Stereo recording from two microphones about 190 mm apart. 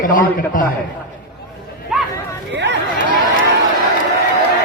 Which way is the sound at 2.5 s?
65° right (ahead or behind).